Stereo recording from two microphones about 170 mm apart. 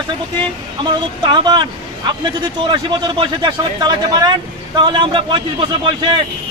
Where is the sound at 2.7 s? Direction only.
30° right (ahead or behind).